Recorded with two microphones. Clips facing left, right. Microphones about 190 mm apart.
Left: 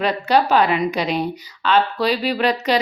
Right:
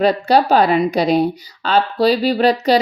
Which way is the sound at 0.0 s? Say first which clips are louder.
Right 4 dB; 35° right (ahead or behind).